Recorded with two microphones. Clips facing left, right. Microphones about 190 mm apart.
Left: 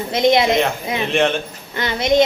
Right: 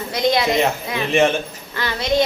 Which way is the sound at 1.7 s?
20° left (ahead or behind).